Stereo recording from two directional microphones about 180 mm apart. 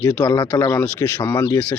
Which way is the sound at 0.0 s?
15° left (ahead or behind).